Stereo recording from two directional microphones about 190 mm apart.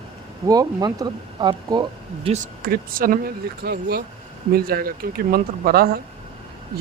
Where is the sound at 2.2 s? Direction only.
35° right (ahead or behind).